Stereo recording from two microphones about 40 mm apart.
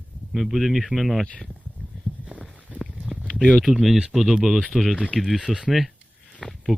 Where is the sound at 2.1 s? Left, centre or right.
Left.